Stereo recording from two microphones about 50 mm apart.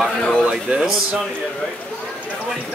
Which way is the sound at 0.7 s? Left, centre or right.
Centre.